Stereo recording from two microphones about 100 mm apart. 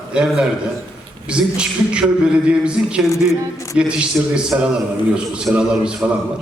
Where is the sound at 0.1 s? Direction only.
10° right (ahead or behind).